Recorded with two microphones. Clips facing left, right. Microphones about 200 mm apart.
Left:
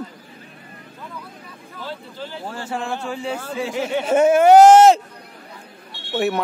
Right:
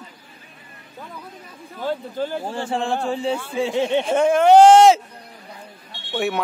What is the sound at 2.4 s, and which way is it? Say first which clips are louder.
Speech: right 3 dB; 30° right (ahead or behind).